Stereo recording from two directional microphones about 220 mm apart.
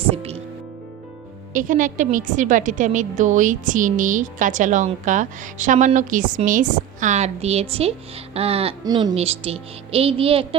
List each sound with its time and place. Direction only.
0.0 s music: 25° right (ahead or behind)
1.5 s a woman's voice: 35° right (ahead or behind)